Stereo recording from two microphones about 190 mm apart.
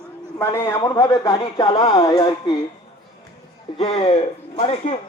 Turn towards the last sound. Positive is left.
turn(degrees=35)  # may be behind; listen again after turning